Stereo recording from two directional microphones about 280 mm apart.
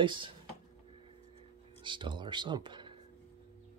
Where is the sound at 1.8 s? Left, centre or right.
Centre.